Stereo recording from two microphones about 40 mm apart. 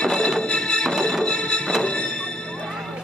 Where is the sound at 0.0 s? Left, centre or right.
Centre.